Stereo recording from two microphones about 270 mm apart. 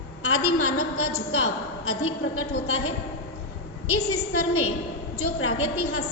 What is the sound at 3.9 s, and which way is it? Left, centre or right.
A woman's voice, left.